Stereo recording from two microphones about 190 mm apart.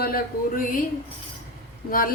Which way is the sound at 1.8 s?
50° left (ahead or behind).